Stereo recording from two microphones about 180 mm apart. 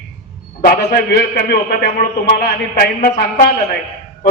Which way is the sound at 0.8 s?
65° left (ahead or behind).